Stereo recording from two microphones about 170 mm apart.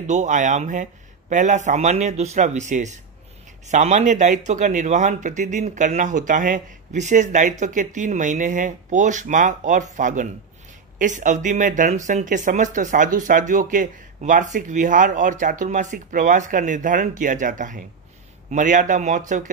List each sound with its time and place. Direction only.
0.0 s speech: 45° right (ahead or behind)